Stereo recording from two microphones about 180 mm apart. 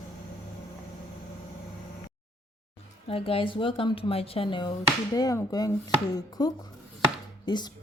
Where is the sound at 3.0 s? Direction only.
30° left (ahead or behind).